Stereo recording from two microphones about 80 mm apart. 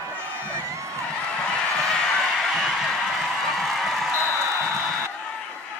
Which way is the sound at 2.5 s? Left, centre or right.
Centre.